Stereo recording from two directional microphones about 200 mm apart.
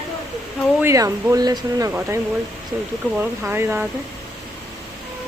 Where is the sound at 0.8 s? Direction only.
15° right (ahead or behind).